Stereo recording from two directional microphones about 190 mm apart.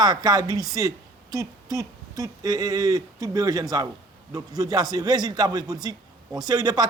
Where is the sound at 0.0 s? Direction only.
20° right (ahead or behind).